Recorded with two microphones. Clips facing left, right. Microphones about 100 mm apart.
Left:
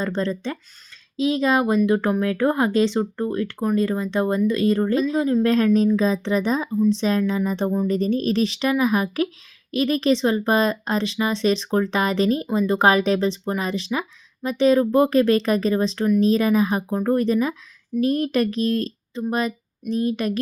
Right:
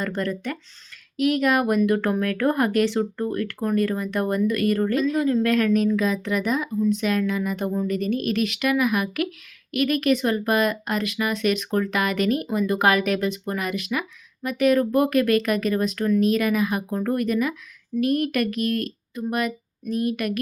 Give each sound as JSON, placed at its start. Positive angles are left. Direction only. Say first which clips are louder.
{"t": 0.0, "sound": "speech", "louder": "left 2 dB", "side_deg": 25}